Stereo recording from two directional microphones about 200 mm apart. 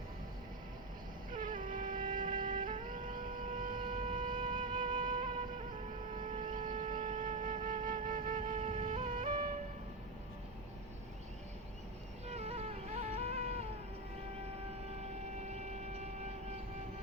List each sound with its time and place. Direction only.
1.3 s vehicle: 45° right (ahead or behind)
4.3 s flute: 25° right (ahead or behind)
4.9 s music: 45° right (ahead or behind)
6.3 s wind instrument: 45° right (ahead or behind)
12.3 s music: 30° right (ahead or behind)
15.4 s vehicle: 35° right (ahead or behind)